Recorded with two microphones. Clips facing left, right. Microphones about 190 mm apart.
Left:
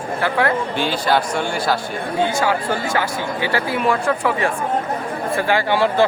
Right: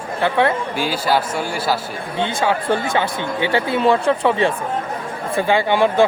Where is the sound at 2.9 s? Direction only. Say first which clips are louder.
Right 1 dB; 25° right (ahead or behind).